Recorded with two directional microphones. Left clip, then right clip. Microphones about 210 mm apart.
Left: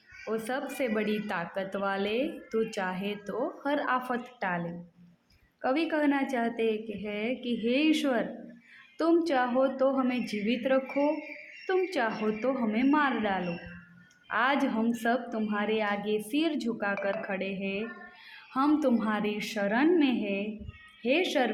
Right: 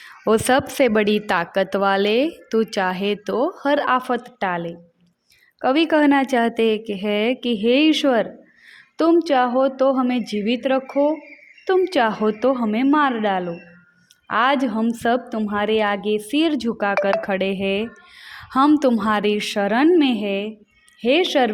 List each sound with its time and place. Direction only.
0.3 s a woman's voice: 50° right (ahead or behind)